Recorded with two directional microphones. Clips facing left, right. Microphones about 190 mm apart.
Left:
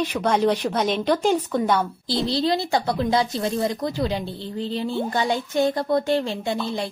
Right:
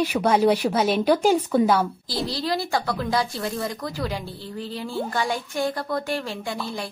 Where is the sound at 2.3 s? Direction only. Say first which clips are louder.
Left 4 dB; 25° left (ahead or behind).